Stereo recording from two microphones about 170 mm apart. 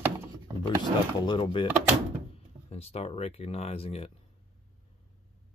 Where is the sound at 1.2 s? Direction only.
30° left (ahead or behind).